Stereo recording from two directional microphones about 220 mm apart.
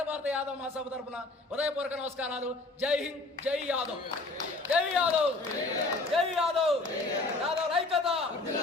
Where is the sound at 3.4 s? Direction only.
30° right (ahead or behind).